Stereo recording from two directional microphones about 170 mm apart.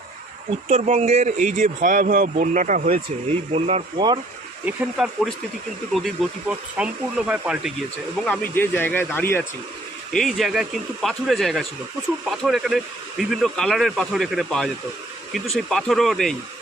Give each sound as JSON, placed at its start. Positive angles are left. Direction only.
{"t": 0.7, "sound": "speech", "side_deg": -40}
{"t": 2.9, "sound": "speech", "side_deg": -35}
{"t": 4.6, "sound": "speech", "side_deg": -5}
{"t": 8.2, "sound": "speech", "side_deg": 10}
{"t": 10.1, "sound": "speech", "side_deg": 0}